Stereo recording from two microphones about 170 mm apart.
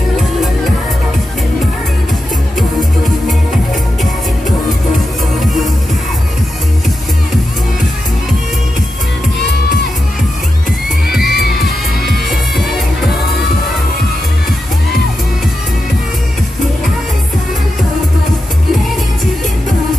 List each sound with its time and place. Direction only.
5.4 s music: centre (ahead or behind)
11.1 s music: 65° left (ahead or behind)